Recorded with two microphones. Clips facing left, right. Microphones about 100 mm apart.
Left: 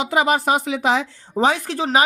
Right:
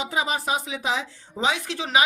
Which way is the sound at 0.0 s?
65° left (ahead or behind).